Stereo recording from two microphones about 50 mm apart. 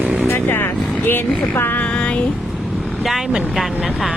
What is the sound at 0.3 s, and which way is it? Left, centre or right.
Speech, left.